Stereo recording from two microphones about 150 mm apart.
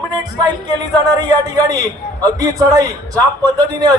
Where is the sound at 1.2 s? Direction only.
25° right (ahead or behind).